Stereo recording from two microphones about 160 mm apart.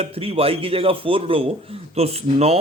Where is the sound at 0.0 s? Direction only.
35° right (ahead or behind).